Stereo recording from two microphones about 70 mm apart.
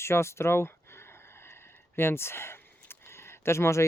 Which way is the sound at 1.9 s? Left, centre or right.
Left.